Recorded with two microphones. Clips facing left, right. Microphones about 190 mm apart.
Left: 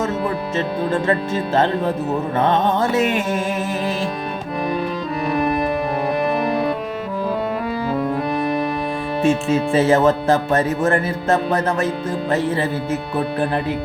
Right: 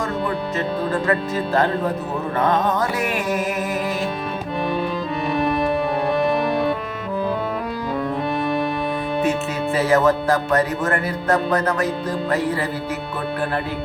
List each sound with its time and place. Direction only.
0.5 s speech: 25° left (ahead or behind)
4.7 s music: centre (ahead or behind)
8.4 s music: centre (ahead or behind)
9.2 s speech: 25° left (ahead or behind)